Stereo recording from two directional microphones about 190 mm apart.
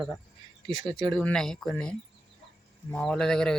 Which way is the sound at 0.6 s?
25° right (ahead or behind).